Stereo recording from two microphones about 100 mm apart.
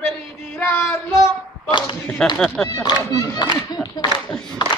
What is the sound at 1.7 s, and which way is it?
Speech, 55° left (ahead or behind).